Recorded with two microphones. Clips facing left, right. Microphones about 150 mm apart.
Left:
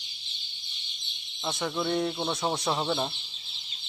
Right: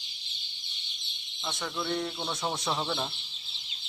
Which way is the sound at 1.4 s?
25° left (ahead or behind).